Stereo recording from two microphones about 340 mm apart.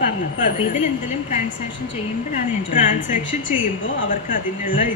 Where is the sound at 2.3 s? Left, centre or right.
Left.